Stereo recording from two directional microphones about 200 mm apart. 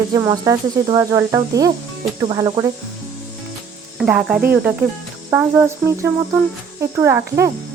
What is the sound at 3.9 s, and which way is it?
Speech, 5° right (ahead or behind).